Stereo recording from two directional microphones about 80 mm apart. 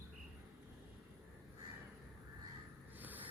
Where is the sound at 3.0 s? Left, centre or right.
Right.